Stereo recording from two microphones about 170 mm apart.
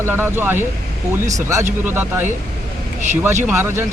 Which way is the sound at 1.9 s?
10° right (ahead or behind).